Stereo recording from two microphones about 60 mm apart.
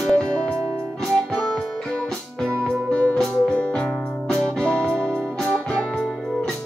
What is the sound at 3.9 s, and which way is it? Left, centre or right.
Music, centre.